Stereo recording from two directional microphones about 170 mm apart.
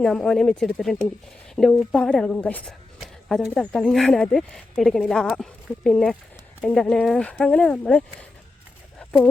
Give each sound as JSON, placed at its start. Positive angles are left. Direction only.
{"t": 0.0, "sound": "speech", "side_deg": 5}